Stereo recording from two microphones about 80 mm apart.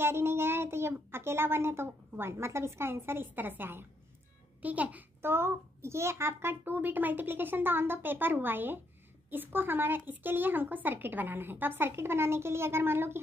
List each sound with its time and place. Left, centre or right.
0.0 s a child's voice: right
5.3 s speech: right